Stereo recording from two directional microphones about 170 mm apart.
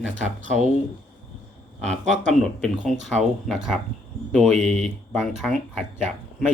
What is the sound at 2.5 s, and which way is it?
Speech, 5° left (ahead or behind).